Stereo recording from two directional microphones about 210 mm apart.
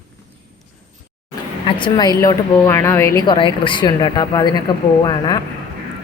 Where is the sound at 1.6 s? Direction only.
25° left (ahead or behind).